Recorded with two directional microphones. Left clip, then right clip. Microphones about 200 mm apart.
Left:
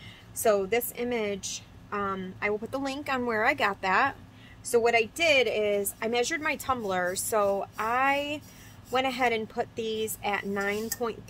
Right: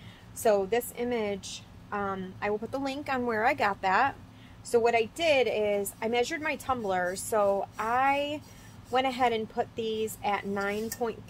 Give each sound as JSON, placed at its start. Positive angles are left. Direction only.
{"t": 0.4, "sound": "a woman's voice", "side_deg": 15}